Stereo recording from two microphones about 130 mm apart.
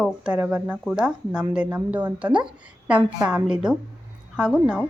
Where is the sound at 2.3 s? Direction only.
40° right (ahead or behind).